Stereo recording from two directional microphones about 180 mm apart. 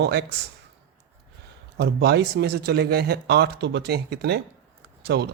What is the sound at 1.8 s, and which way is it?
Speech, 65° right (ahead or behind).